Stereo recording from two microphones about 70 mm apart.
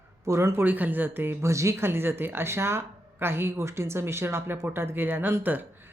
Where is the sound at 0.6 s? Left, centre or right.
Right.